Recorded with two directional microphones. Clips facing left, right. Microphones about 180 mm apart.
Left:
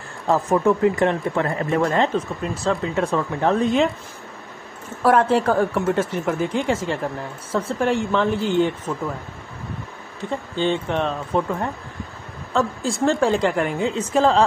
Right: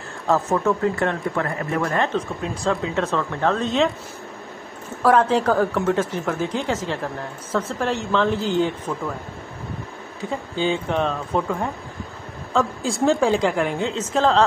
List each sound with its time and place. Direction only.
0.3 s speech: 15° left (ahead or behind)
2.1 s a woman's voice: 5° left (ahead or behind)
5.0 s speech: 5° left (ahead or behind)
10.5 s a woman's voice: centre (ahead or behind)